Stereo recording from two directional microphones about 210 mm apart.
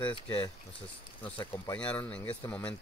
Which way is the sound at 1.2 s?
10° left (ahead or behind).